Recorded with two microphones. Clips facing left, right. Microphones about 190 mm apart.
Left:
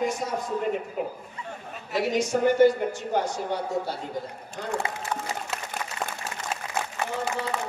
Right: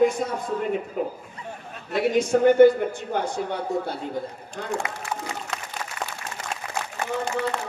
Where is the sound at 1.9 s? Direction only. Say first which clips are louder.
Right 4 dB; 55° right (ahead or behind).